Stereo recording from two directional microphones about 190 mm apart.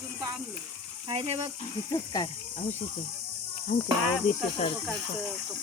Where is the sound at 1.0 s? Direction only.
30° right (ahead or behind).